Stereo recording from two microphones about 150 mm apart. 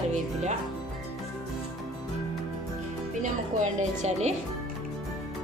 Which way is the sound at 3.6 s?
50° right (ahead or behind).